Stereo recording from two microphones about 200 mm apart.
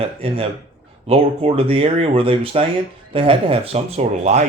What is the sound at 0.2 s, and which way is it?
Speech, 30° right (ahead or behind).